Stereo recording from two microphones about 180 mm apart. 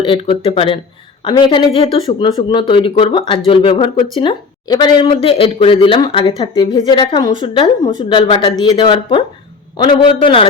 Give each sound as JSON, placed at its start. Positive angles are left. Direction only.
{"t": 0.0, "sound": "speech", "side_deg": 30}